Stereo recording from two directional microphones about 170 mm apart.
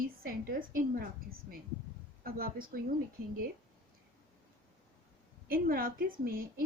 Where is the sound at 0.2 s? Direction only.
60° right (ahead or behind).